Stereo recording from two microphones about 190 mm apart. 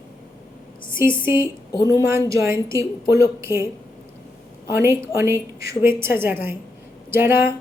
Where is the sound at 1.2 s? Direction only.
15° right (ahead or behind).